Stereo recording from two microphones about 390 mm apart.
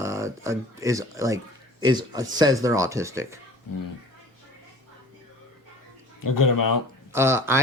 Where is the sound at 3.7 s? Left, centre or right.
Left.